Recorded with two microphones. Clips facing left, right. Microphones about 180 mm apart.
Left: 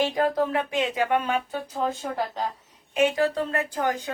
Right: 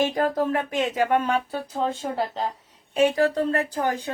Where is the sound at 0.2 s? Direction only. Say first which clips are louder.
Even; 45° right (ahead or behind).